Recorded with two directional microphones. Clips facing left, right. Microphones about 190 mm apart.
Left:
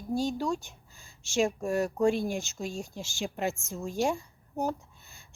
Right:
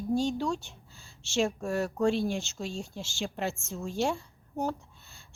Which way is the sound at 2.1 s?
45° left (ahead or behind).